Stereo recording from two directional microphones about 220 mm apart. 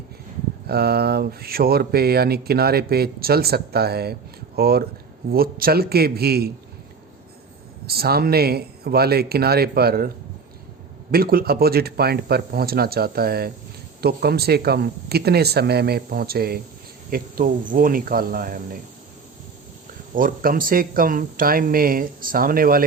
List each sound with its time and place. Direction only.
0.7 s speech: 45° right (ahead or behind)
7.9 s speech: 45° right (ahead or behind)
11.1 s speech: 45° right (ahead or behind)
20.1 s speech: 40° right (ahead or behind)